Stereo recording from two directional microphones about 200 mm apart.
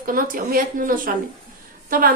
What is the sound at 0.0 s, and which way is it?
A woman's voice, 45° right (ahead or behind).